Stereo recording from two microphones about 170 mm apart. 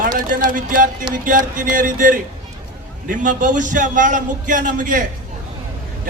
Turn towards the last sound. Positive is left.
turn(degrees=-50)  # may be behind; listen again after turning